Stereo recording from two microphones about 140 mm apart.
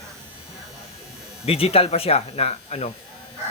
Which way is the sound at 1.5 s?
45° left (ahead or behind).